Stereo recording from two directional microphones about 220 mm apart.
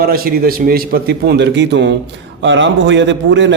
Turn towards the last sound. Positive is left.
turn(degrees=-55)  # may be behind; listen again after turning